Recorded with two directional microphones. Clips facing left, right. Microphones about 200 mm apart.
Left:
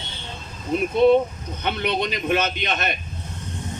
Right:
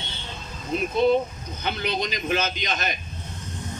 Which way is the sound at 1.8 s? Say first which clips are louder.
Left 4 dB; 60° left (ahead or behind).